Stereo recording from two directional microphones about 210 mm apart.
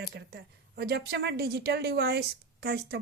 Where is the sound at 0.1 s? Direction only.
50° right (ahead or behind).